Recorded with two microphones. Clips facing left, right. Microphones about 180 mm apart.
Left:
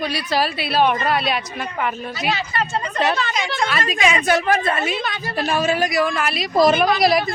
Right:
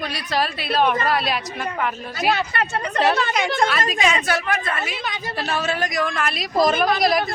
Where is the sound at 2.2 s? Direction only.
55° right (ahead or behind).